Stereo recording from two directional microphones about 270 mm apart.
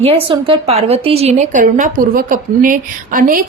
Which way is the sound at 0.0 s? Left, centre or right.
Right.